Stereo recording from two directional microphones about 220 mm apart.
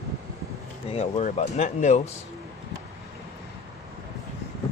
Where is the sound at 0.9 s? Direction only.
30° left (ahead or behind).